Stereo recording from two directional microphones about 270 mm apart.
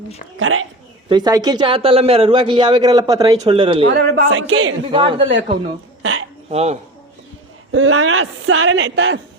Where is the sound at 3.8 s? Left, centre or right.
Right.